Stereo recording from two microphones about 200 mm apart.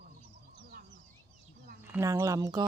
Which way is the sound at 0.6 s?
45° right (ahead or behind).